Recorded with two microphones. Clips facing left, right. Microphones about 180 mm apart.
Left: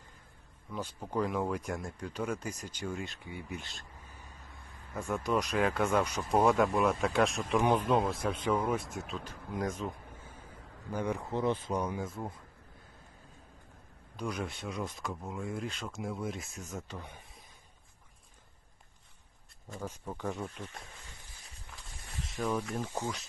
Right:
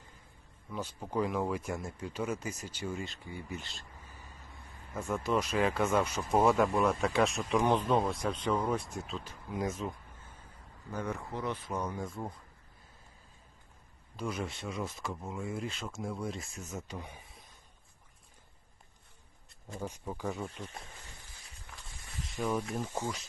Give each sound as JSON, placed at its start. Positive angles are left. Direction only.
{"t": 0.7, "sound": "speech", "side_deg": -5}
{"t": 3.2, "sound": "a sound", "side_deg": 0}
{"t": 5.1, "sound": "speech", "side_deg": 0}
{"t": 10.2, "sound": "a sound", "side_deg": 10}
{"t": 10.9, "sound": "speech", "side_deg": 15}
{"t": 11.8, "sound": "speech", "side_deg": 5}
{"t": 14.2, "sound": "speech", "side_deg": 0}
{"t": 19.8, "sound": "speech", "side_deg": -5}
{"t": 21.7, "sound": "walk", "side_deg": 0}
{"t": 22.9, "sound": "speech", "side_deg": -10}